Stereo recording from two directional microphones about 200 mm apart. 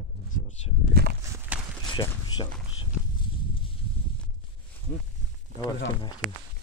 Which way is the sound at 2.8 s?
25° left (ahead or behind).